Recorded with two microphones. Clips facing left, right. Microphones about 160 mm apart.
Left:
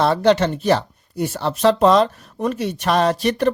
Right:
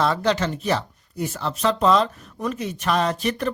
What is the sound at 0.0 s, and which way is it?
Speech, 65° left (ahead or behind).